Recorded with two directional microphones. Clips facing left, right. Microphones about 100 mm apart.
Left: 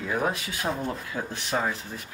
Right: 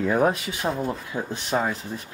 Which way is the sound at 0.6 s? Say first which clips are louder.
Right 3 dB; centre (ahead or behind).